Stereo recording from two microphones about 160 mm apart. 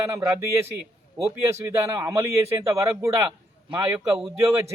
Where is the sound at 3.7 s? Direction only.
10° right (ahead or behind).